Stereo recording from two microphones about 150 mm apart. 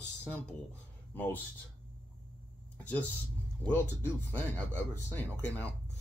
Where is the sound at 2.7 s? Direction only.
10° left (ahead or behind).